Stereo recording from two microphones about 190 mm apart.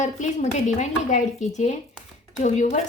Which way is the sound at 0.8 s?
40° left (ahead or behind).